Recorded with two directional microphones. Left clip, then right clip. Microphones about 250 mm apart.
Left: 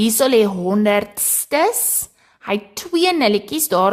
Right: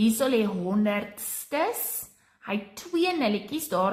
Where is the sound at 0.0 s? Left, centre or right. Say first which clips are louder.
Left 10 dB; left.